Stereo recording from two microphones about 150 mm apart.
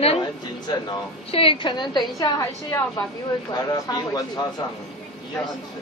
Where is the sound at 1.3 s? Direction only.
40° left (ahead or behind).